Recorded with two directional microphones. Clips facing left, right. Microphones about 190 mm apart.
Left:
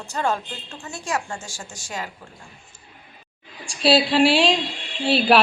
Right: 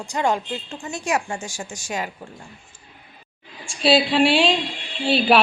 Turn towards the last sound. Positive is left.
turn(degrees=0)  # may be behind; listen again after turning